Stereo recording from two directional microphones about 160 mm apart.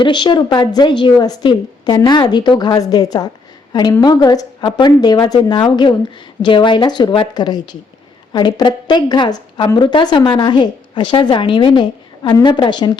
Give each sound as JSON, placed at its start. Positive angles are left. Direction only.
{"t": 0.0, "sound": "a woman's voice", "side_deg": 30}